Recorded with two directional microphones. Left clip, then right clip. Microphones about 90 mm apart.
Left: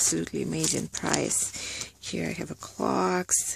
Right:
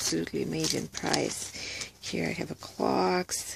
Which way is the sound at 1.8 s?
35° left (ahead or behind).